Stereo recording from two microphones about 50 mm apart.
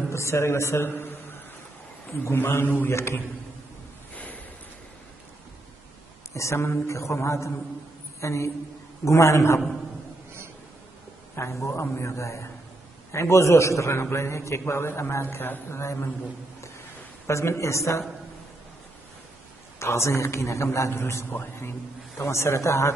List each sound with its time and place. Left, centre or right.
0.1 s a man's voice: left
0.8 s a man's voice: left
2.9 s a man's voice: left
4.1 s a sound: left
6.3 s a man's voice: left
11.3 s a man's voice: left
14.7 s a man's voice: left
17.3 s a man's voice: left
19.8 s a man's voice: left
21.0 s a man's voice: left
22.2 s a man's voice: left